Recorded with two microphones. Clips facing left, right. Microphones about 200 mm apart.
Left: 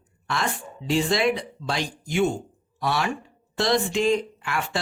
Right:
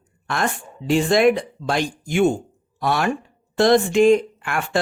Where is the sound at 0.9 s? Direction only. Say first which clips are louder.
Right 6 dB; 50° right (ahead or behind).